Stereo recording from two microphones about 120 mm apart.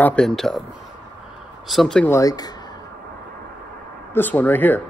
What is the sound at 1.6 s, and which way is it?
Speech, centre (ahead or behind).